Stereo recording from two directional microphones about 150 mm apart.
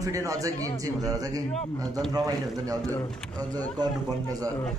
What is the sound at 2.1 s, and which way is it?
A man's voice, 25° right (ahead or behind).